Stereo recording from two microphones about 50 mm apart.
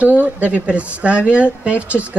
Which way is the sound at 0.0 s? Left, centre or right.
Right.